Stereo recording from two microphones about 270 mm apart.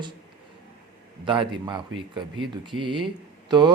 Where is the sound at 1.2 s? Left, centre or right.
Centre.